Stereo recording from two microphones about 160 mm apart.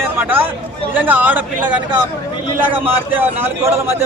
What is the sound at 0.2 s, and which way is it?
A man's voice, 15° right (ahead or behind).